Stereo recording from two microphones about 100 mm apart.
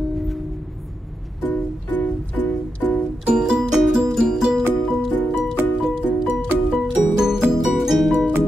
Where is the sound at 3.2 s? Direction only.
10° right (ahead or behind).